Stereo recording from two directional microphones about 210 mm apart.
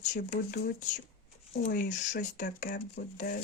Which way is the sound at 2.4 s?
45° left (ahead or behind).